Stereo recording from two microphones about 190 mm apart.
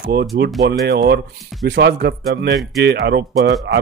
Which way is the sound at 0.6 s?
60° right (ahead or behind).